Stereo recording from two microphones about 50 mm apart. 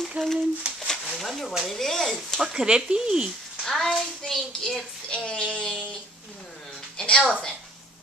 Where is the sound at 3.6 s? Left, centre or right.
Centre.